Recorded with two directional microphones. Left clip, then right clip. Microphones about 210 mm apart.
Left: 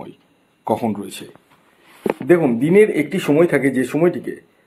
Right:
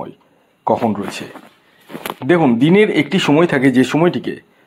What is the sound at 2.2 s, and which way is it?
Speech, 45° right (ahead or behind).